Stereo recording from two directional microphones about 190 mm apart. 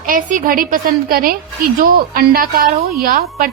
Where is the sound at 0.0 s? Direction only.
45° right (ahead or behind).